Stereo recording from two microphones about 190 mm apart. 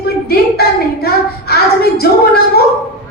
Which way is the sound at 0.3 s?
55° left (ahead or behind).